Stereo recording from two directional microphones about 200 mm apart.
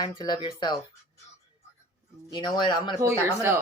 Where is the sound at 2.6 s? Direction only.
25° left (ahead or behind).